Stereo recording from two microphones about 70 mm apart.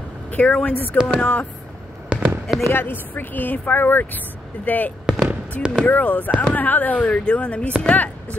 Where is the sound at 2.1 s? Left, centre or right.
Centre.